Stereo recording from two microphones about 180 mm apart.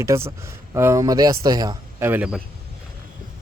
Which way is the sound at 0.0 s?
15° right (ahead or behind).